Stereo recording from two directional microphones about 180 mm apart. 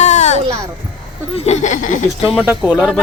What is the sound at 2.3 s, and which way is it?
Speech, 5° right (ahead or behind).